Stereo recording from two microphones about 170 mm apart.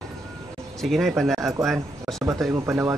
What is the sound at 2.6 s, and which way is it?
Speech, 15° right (ahead or behind).